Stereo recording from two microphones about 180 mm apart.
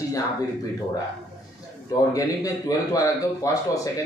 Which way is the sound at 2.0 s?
20° left (ahead or behind).